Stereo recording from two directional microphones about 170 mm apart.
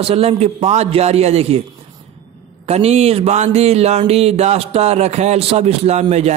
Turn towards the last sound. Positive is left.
turn(degrees=-40)  # may be behind; listen again after turning